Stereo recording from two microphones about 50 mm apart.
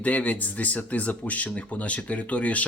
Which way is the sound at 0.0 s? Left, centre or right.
Left.